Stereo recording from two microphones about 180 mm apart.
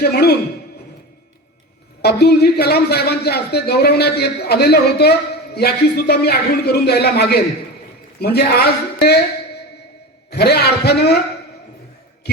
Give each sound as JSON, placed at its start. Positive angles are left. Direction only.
{"t": 0.0, "sound": "a man's voice", "side_deg": 65}
{"t": 2.0, "sound": "a man's voice", "side_deg": 65}
{"t": 10.2, "sound": "a man's voice", "side_deg": 65}